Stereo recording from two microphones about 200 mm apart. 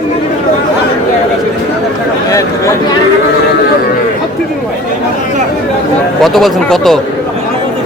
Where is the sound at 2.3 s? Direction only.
15° left (ahead or behind).